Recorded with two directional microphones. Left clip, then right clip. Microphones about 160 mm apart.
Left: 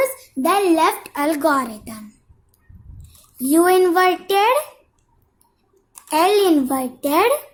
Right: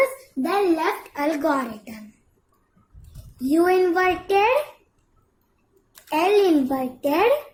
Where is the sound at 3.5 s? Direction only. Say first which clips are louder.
Left 4 dB; 45° left (ahead or behind).